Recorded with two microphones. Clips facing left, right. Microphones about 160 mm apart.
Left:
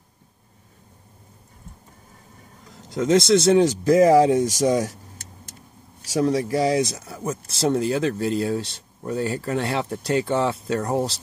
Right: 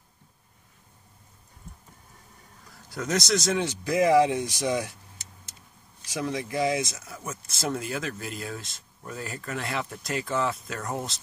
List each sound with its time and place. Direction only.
2.7 s speech: 20° left (ahead or behind)